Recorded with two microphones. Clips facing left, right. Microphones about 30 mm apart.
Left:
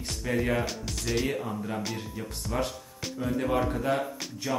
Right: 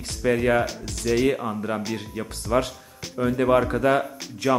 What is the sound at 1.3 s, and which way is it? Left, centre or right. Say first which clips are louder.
Speech: right 7 dB; right.